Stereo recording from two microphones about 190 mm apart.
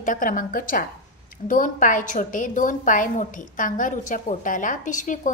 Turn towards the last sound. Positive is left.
turn(degrees=40)  # may be behind; listen again after turning